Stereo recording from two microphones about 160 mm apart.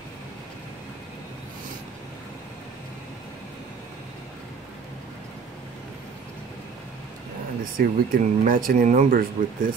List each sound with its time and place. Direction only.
7.7 s speech: 60° right (ahead or behind)